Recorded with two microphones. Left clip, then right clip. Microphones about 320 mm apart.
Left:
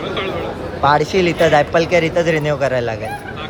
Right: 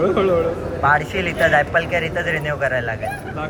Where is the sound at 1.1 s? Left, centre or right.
Centre.